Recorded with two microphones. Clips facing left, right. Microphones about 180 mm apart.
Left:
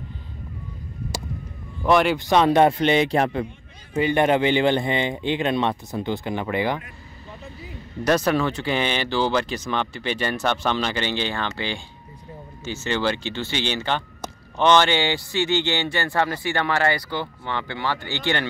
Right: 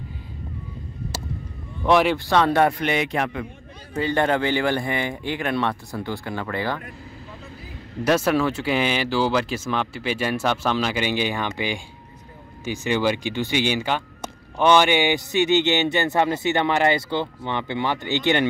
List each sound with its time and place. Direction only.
1.8 s speech: centre (ahead or behind)
2.1 s speech: 20° left (ahead or behind)
4.0 s speech: 20° left (ahead or behind)
8.0 s speech: 5° right (ahead or behind)